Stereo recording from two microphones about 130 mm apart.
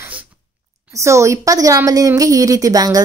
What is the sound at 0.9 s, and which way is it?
Speech, 25° right (ahead or behind).